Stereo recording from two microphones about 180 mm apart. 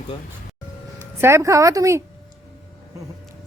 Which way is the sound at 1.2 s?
15° right (ahead or behind).